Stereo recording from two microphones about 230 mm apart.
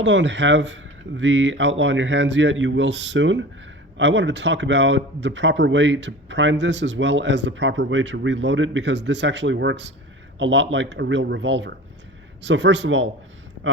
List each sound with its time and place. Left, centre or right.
0.0 s speech: right